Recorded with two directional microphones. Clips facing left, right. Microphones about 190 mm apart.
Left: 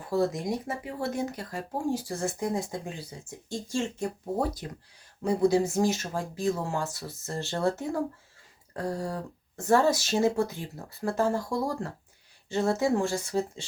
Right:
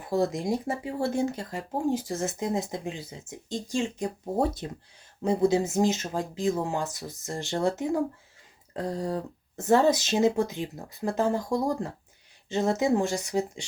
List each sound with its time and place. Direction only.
0.0 s speech: 25° right (ahead or behind)